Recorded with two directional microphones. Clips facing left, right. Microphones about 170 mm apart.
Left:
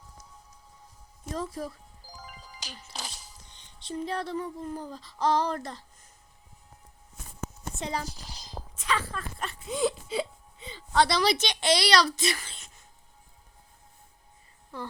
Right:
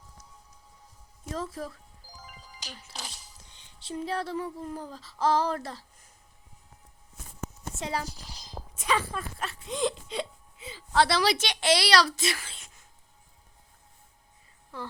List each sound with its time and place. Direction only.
1.3 s speech: centre (ahead or behind)
2.1 s music: 90° left
3.6 s speech: 5° right (ahead or behind)
7.8 s speech: 5° right (ahead or behind)
8.7 s a sound: 10° right (ahead or behind)
9.4 s speech: centre (ahead or behind)